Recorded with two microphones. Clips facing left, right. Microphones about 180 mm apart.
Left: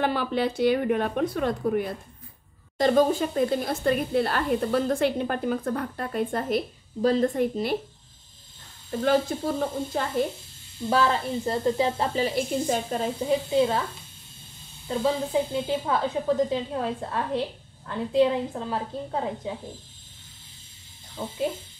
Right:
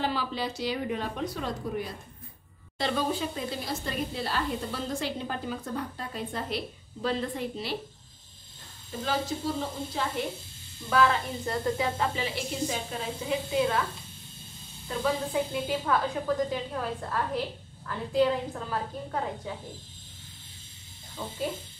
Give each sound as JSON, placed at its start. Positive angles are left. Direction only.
{"t": 0.0, "sound": "a woman's voice", "side_deg": 55}
{"t": 2.8, "sound": "a woman's voice", "side_deg": 45}
{"t": 9.0, "sound": "a woman's voice", "side_deg": 55}
{"t": 10.9, "sound": "a woman's voice", "side_deg": 30}
{"t": 13.2, "sound": "a woman's voice", "side_deg": 35}
{"t": 14.9, "sound": "speech", "side_deg": 20}
{"t": 21.2, "sound": "speech", "side_deg": 20}